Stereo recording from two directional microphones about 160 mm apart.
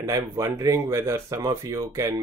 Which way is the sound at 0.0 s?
20° right (ahead or behind).